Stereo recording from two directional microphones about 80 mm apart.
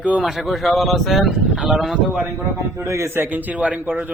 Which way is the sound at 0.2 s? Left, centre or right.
Centre.